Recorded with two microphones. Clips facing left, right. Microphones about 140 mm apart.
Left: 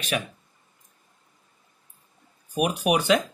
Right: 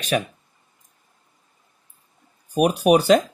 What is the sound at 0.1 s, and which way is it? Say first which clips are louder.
Speech: right 6 dB; 40° right (ahead or behind).